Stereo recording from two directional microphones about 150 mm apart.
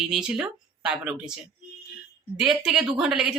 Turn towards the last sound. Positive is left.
turn(degrees=-5)  # may be behind; listen again after turning